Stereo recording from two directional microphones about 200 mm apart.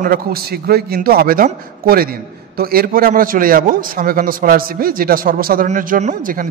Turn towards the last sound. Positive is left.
turn(degrees=-40)  # may be behind; listen again after turning